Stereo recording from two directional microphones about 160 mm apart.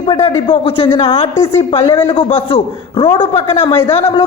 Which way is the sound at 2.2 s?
45° left (ahead or behind).